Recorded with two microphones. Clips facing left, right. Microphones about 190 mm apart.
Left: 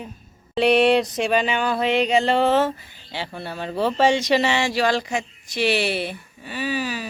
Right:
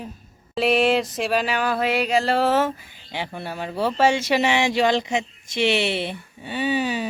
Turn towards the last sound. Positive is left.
turn(degrees=-25)  # may be behind; listen again after turning